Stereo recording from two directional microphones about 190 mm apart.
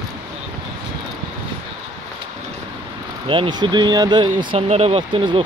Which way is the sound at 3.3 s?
25° right (ahead or behind).